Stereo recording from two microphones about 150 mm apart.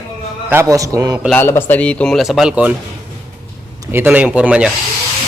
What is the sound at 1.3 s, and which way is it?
Speech, 15° left (ahead or behind).